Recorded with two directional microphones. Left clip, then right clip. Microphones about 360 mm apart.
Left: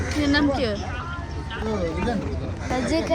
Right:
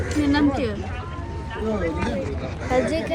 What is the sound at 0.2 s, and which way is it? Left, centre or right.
Speech, centre.